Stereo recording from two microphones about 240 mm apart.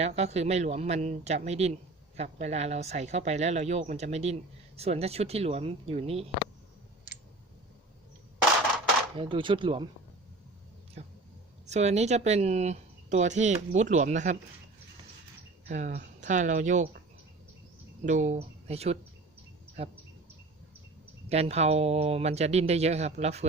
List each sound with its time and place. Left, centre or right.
0.0 s speech: right
9.1 s speech: right
11.0 s a sound: right
11.6 s speech: right
15.7 s speech: right
18.0 s speech: right
21.2 s speech: right